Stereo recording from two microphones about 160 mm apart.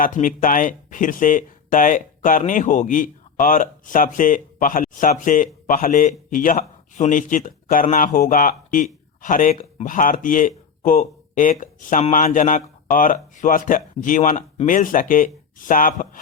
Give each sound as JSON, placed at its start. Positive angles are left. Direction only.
{"t": 0.0, "sound": "speech", "side_deg": 55}